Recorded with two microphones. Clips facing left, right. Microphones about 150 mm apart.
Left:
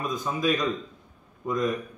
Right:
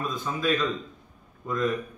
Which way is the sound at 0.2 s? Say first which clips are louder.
Even; 15° left (ahead or behind).